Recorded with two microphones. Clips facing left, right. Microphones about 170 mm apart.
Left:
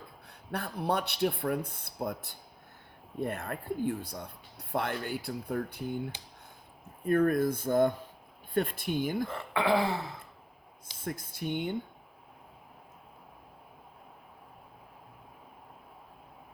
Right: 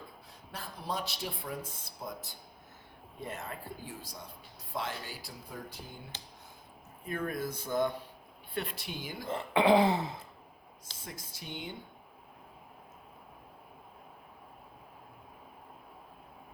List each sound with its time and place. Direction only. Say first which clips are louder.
0.3 s speech: left 10 dB; 60° left (ahead or behind)
7.0 s speech: left 10 dB; 55° left (ahead or behind)
9.2 s speech: right 3 dB; 20° right (ahead or behind)
11.0 s speech: left 11 dB; 55° left (ahead or behind)